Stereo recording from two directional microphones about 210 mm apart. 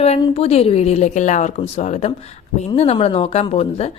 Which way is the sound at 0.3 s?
30° left (ahead or behind).